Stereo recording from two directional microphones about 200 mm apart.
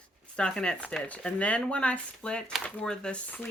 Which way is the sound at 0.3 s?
5° left (ahead or behind).